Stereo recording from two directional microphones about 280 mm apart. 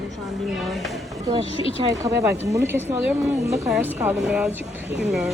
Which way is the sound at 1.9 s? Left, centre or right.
Centre.